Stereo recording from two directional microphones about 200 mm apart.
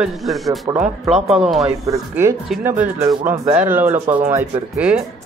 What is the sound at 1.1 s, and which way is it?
Speech, 30° right (ahead or behind).